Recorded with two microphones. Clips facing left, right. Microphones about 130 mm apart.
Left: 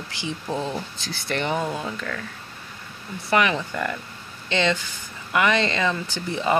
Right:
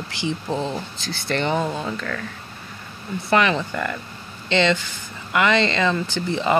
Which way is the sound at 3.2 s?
10° left (ahead or behind).